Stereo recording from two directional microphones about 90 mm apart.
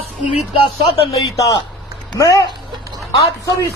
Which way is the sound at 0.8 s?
90° left.